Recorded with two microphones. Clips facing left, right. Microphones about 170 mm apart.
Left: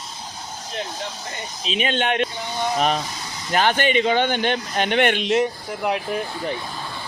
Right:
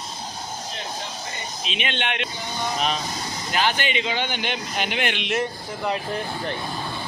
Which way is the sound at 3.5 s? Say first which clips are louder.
Left 5 dB; 50° left (ahead or behind).